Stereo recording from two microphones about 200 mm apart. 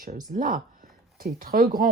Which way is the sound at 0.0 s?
45° right (ahead or behind).